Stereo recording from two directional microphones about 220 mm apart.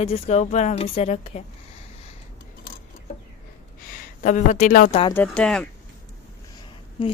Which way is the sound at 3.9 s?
35° left (ahead or behind).